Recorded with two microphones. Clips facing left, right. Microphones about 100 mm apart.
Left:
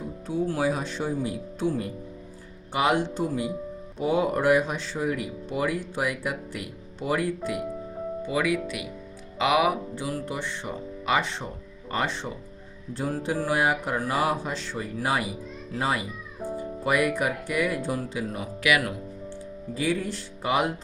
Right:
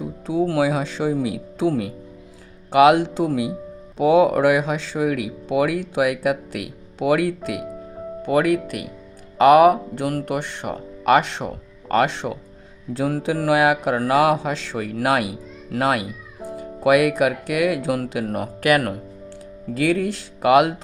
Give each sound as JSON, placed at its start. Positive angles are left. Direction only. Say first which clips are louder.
{"t": 0.0, "sound": "speech", "louder": "right 6 dB", "side_deg": -90}
{"t": 8.2, "sound": "speech", "louder": "right 8 dB", "side_deg": -60}
{"t": 16.5, "sound": "speech", "louder": "right 9 dB", "side_deg": -90}
{"t": 19.3, "sound": "speech", "louder": "right 4 dB", "side_deg": -75}